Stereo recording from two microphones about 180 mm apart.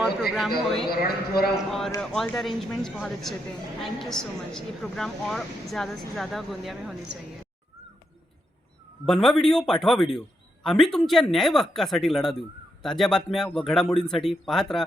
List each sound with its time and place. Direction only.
0.0 s a sound: centre (ahead or behind)
0.6 s speech: centre (ahead or behind)
0.9 s speech: 60° left (ahead or behind)
1.5 s speech: centre (ahead or behind)
9.0 s speech: 5° left (ahead or behind)